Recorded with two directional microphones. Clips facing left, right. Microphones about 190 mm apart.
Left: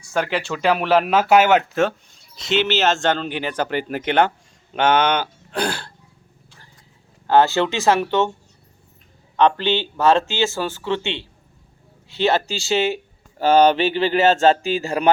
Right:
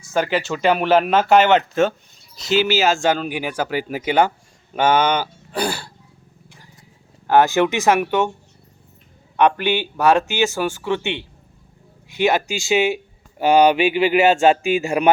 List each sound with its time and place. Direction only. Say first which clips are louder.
0.0 s speech: right 2 dB; centre (ahead or behind)
2.5 s speech: right 2 dB; 10° right (ahead or behind)
7.3 s speech: right 1 dB; 15° right (ahead or behind)
9.4 s speech: even; 15° right (ahead or behind)